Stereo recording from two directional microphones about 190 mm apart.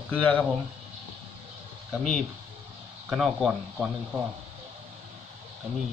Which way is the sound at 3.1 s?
Centre (ahead or behind).